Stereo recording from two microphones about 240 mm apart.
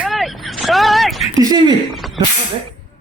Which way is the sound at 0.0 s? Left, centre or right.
Centre.